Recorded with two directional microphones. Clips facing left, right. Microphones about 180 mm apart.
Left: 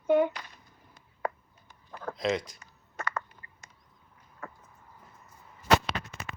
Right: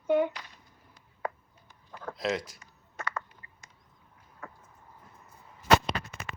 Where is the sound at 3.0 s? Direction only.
50° left (ahead or behind).